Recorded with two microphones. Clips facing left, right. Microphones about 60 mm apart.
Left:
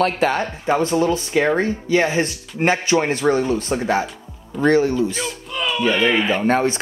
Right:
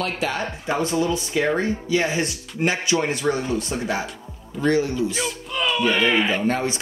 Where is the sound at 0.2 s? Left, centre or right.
Left.